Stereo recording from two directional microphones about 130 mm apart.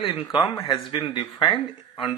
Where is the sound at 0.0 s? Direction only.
40° left (ahead or behind).